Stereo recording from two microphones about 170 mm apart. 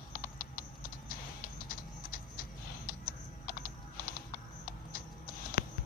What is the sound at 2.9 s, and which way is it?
Typing, 60° left (ahead or behind).